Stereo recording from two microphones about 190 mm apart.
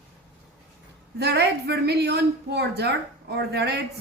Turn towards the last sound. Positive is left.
turn(degrees=-60)  # may be behind; listen again after turning